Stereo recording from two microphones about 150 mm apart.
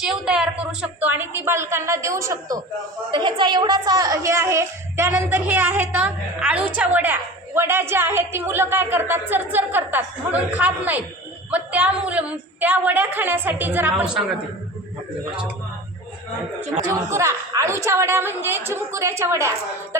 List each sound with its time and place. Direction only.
0.0 s a woman's voice: 5° right (ahead or behind); by 2.6 s 20° right (ahead or behind)
3.1 s a woman's voice: 30° right (ahead or behind); by 14.2 s 5° right (ahead or behind)
16.8 s a woman's voice: 20° right (ahead or behind)